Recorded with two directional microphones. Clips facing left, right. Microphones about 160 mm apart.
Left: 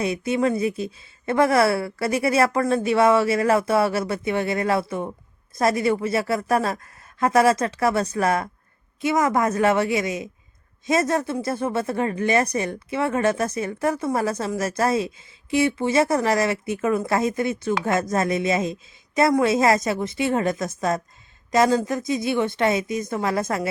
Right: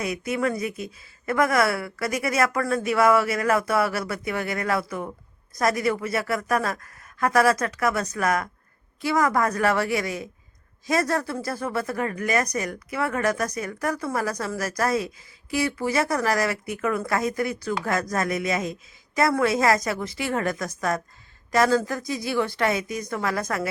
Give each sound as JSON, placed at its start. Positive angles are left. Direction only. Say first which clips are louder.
{"t": 0.0, "sound": "speech", "louder": "left 4 dB", "side_deg": 25}